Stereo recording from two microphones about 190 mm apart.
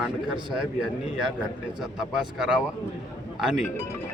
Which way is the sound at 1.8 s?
Centre (ahead or behind).